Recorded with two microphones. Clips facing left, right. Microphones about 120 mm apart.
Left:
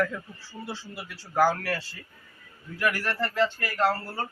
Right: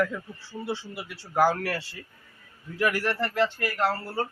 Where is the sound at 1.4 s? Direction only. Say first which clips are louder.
Right 1 dB; 25° right (ahead or behind).